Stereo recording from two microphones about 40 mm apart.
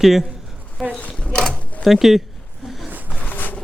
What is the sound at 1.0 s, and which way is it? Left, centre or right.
Mechanisms, left.